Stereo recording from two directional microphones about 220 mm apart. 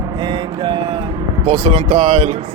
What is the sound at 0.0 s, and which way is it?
Vehicle, 20° right (ahead or behind).